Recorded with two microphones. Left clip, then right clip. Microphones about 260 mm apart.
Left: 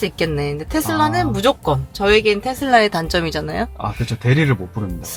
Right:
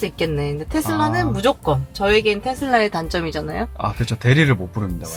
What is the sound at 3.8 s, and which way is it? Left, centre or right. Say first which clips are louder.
Speech: right 1 dB; centre.